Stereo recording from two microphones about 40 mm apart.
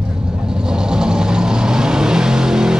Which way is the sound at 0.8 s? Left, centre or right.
Centre.